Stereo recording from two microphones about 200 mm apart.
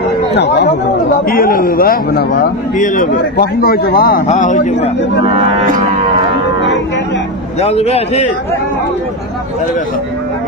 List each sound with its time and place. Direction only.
0.4 s speech: 60° left (ahead or behind)
1.3 s a man's voice: 45° left (ahead or behind)
4.3 s a man's voice: 35° left (ahead or behind)
7.6 s a man's voice: 30° left (ahead or behind)